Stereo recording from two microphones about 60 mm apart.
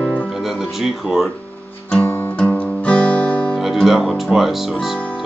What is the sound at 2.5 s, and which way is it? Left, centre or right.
Guitar, left.